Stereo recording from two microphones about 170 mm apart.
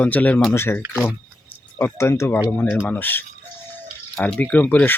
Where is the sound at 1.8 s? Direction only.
15° left (ahead or behind).